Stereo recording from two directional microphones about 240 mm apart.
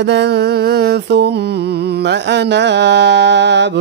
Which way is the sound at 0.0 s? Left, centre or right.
Right.